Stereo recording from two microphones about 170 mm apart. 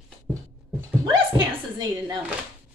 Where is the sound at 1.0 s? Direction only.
25° right (ahead or behind).